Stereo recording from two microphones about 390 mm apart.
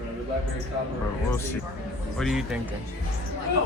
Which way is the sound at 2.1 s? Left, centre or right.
Centre.